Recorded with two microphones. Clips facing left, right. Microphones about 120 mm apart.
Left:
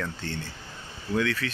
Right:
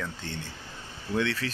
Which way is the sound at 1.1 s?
30° right (ahead or behind).